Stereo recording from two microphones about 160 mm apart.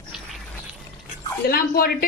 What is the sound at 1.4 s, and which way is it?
Speech, 75° left (ahead or behind).